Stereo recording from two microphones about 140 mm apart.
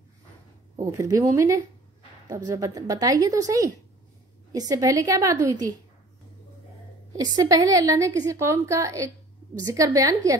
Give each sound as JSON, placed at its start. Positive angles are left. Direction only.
{"t": 0.7, "sound": "a woman's voice", "side_deg": -25}
{"t": 7.2, "sound": "a woman's voice", "side_deg": -25}